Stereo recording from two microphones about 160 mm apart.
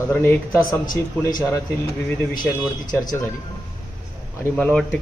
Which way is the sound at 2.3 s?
25° left (ahead or behind).